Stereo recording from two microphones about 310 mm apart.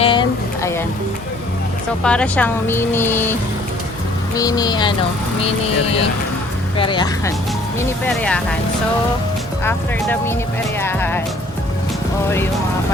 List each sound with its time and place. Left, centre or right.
0.0 s a sound: centre
2.0 s speech: centre
4.4 s speech: centre
6.7 s speech: centre
9.6 s speech: centre
10.8 s music: centre